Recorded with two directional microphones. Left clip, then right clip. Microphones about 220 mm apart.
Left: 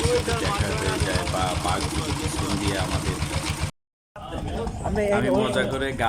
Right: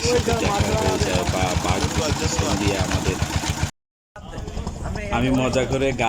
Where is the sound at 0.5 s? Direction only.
40° right (ahead or behind).